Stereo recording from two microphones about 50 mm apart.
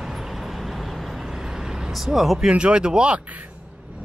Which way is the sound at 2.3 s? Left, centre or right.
Centre.